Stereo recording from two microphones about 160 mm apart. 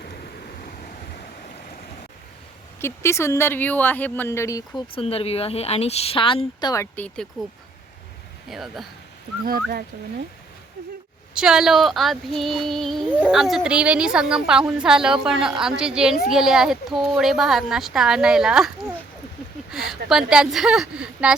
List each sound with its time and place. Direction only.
2.8 s speech: 15° left (ahead or behind)
4.9 s a woman's voice: 35° left (ahead or behind)
6.9 s speech: 10° left (ahead or behind)
8.4 s a woman's voice: centre (ahead or behind)
9.4 s speech: 70° right (ahead or behind)
11.3 s a woman's voice: 5° right (ahead or behind)